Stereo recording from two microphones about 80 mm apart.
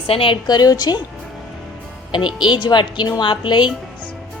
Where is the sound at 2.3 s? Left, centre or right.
Left.